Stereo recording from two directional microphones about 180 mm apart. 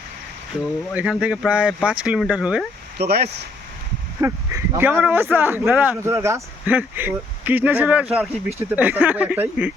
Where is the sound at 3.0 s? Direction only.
60° right (ahead or behind).